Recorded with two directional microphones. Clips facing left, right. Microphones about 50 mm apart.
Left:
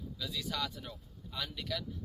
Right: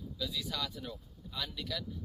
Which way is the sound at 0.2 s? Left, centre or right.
Left.